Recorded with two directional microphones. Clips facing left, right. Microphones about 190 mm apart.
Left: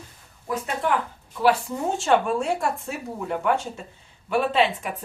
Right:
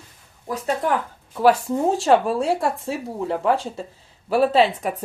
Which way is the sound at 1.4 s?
40° right (ahead or behind).